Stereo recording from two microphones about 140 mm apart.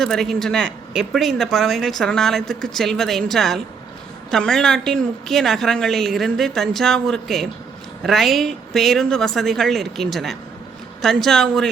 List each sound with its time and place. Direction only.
0.0 s speech: 5° left (ahead or behind)